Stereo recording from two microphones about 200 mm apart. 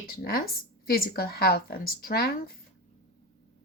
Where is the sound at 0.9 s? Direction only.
50° left (ahead or behind).